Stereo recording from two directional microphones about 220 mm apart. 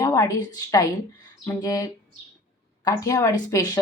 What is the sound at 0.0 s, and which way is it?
Speech, 15° left (ahead or behind).